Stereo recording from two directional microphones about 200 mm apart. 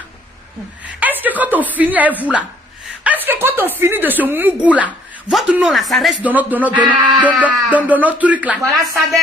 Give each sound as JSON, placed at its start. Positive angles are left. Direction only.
{"t": 0.9, "sound": "a woman's voice", "side_deg": -10}
{"t": 2.8, "sound": "chuckle", "side_deg": -5}
{"t": 3.8, "sound": "speech", "side_deg": -10}
{"t": 6.8, "sound": "a sound", "side_deg": -20}
{"t": 7.2, "sound": "speech", "side_deg": -5}